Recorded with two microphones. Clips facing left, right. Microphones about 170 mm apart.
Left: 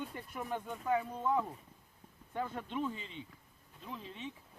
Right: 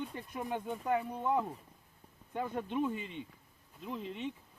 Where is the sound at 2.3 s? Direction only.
15° right (ahead or behind).